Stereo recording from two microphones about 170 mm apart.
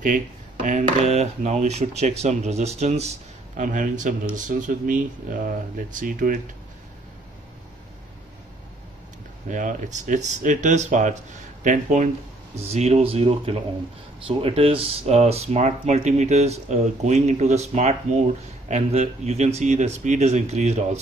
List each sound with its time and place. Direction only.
0.7 s speech: 45° right (ahead or behind)
9.5 s speech: 50° right (ahead or behind)